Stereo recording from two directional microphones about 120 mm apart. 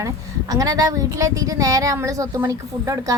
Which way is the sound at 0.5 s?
30° right (ahead or behind).